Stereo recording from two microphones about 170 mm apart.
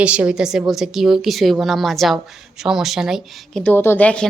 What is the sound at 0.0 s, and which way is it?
A woman's voice, 5° right (ahead or behind).